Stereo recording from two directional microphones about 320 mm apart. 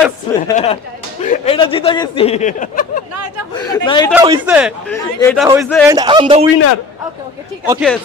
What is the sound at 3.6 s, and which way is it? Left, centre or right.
Speech, centre.